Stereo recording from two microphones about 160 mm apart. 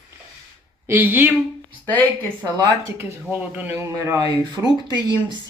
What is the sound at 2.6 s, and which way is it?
Speech, 15° right (ahead or behind).